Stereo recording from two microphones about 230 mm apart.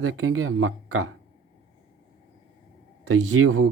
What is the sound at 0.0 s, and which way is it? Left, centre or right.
A man's voice, right.